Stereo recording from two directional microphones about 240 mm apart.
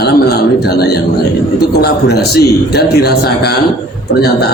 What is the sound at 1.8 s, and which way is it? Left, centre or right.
A man's voice, left.